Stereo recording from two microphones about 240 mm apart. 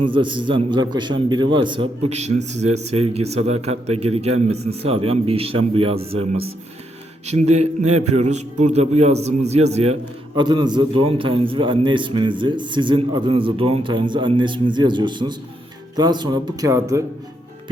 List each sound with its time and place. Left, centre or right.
0.0 s a man's voice: centre